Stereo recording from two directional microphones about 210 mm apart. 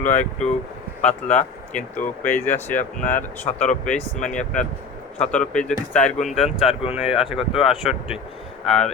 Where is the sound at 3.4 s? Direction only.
35° left (ahead or behind).